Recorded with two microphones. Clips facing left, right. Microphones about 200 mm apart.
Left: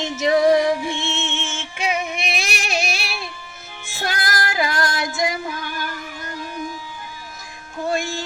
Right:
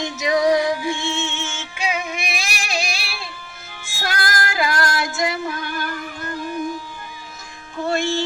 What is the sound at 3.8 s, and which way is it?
Female singing, 20° left (ahead or behind).